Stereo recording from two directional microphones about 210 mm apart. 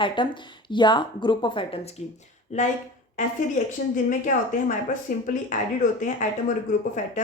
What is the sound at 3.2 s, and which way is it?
Speech, 35° left (ahead or behind).